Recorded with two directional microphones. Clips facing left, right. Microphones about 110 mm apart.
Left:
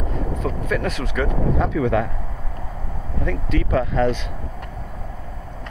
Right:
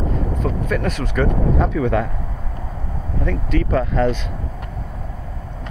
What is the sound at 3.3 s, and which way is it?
Speech, 40° right (ahead or behind).